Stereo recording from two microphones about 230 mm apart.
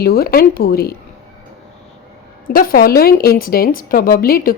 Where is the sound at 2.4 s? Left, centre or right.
Left.